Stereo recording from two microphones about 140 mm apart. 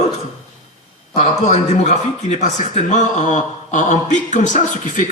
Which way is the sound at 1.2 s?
50° left (ahead or behind).